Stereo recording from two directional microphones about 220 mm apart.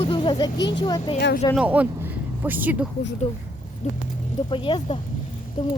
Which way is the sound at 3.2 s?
25° left (ahead or behind).